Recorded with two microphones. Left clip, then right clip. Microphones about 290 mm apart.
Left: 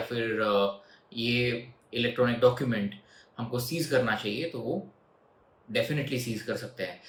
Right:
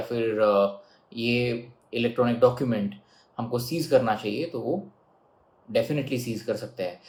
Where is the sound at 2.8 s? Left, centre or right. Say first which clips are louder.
Right 2 dB; left.